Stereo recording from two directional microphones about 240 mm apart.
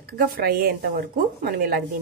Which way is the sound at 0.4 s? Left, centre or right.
Right.